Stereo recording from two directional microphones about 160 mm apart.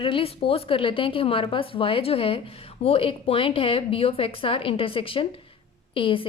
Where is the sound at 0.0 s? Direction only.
35° left (ahead or behind).